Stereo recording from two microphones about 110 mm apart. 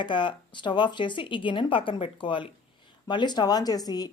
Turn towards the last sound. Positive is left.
turn(degrees=35)  # may be behind; listen again after turning